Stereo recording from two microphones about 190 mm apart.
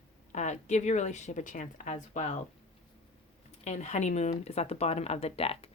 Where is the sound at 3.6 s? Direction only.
35° left (ahead or behind).